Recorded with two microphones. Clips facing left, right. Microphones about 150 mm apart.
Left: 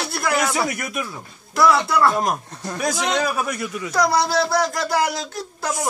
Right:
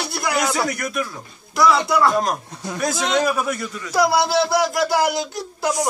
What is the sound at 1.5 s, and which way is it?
Speech, centre (ahead or behind).